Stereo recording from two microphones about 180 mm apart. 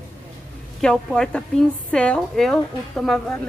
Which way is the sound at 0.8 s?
5° left (ahead or behind).